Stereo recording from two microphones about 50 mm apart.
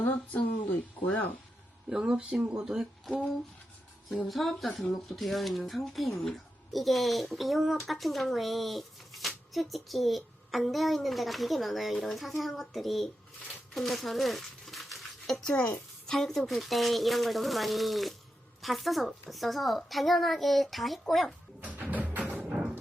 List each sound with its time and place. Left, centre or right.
0.0 s speech: left
1.9 s speech: centre
4.3 s speech: centre
13.7 s a sound: centre
15.5 s a woman's voice: left
16.0 s speech: centre
21.6 s music: right